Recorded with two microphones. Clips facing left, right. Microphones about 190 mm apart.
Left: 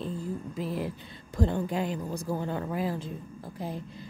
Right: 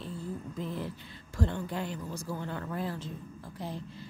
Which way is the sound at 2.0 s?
50° left (ahead or behind).